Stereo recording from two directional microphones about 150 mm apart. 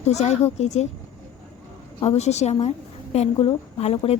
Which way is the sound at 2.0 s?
45° left (ahead or behind).